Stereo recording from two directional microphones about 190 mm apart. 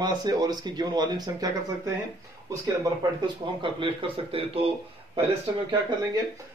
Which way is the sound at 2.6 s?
20° right (ahead or behind).